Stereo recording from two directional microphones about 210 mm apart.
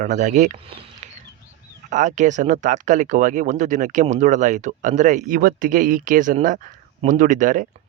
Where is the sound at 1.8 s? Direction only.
35° right (ahead or behind).